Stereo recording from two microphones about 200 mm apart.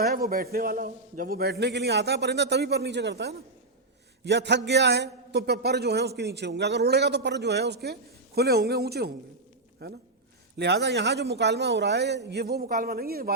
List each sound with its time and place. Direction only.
0.0 s a man's voice: 45° right (ahead or behind)